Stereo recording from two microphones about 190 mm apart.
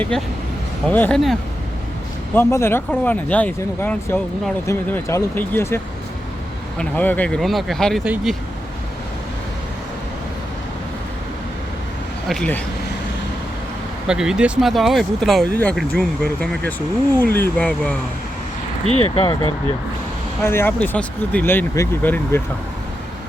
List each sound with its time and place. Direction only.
0.1 s speech: 5° left (ahead or behind)
12.3 s speech: 5° left (ahead or behind)
14.1 s speech: 5° right (ahead or behind)
19.1 s speech: 30° left (ahead or behind)
20.4 s speech: 10° left (ahead or behind)